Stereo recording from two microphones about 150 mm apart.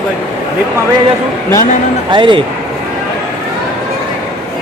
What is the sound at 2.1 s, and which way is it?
Speech, 35° right (ahead or behind).